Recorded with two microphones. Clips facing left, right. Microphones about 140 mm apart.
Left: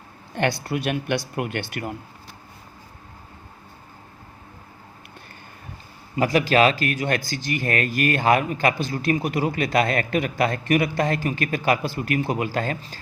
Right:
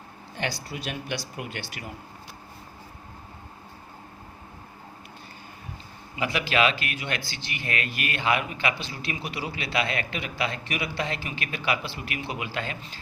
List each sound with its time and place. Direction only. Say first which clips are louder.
0.3 s speech: left 9 dB; 60° left (ahead or behind)
6.1 s a man's voice: left 7 dB; 40° left (ahead or behind)